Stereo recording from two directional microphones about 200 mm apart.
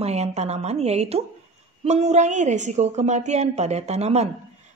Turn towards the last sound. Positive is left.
turn(degrees=-30)  # may be behind; listen again after turning